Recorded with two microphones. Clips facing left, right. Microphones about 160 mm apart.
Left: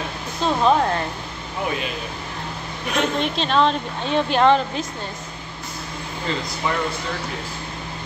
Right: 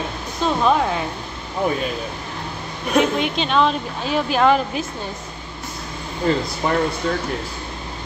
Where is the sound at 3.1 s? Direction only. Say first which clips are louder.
Right 1 dB; 5° right (ahead or behind).